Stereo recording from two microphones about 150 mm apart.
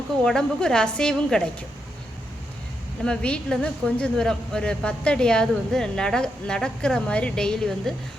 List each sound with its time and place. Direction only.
0.3 s a woman's voice: 5° left (ahead or behind)
3.0 s a woman's voice: 5° left (ahead or behind)